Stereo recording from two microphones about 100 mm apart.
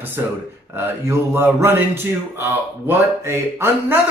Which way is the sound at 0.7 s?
25° right (ahead or behind).